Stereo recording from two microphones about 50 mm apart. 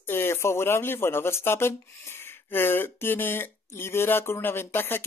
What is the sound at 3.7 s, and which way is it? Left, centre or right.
Speech, left.